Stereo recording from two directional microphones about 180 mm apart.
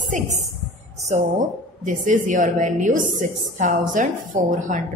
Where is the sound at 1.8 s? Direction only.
45° right (ahead or behind).